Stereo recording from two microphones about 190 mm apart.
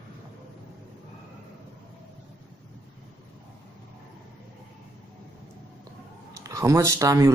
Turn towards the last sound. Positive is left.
turn(degrees=-15)  # may be behind; listen again after turning